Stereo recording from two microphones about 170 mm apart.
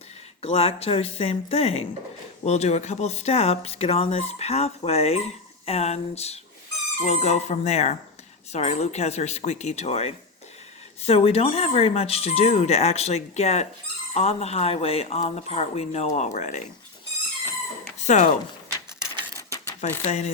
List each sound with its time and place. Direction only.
0.4 s speech: 35° left (ahead or behind)
18.0 s speech: 45° left (ahead or behind)
19.4 s mechanisms: 20° left (ahead or behind)
20.0 s speech: 40° left (ahead or behind)